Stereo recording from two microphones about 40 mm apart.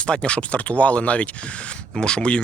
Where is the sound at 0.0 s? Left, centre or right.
Left.